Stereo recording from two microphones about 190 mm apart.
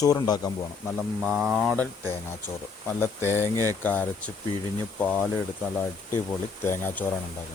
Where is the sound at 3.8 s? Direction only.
10° left (ahead or behind).